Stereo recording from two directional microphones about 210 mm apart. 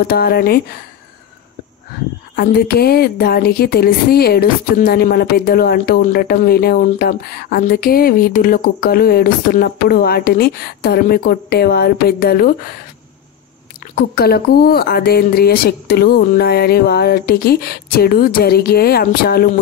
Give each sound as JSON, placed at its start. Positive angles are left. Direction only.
{"t": 0.0, "sound": "speech", "side_deg": 45}
{"t": 2.3, "sound": "speech", "side_deg": 45}
{"t": 14.1, "sound": "speech", "side_deg": 45}